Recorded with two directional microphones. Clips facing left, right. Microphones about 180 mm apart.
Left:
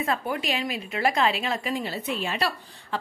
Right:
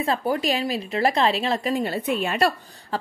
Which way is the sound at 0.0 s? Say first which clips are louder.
Right 4 dB; 35° right (ahead or behind).